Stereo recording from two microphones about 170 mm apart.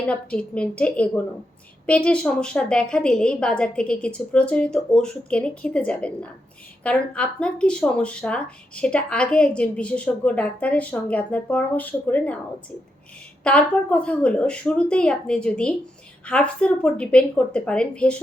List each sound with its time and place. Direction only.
0.0 s a woman's voice: 5° left (ahead or behind)
13.4 s speech: 5° left (ahead or behind)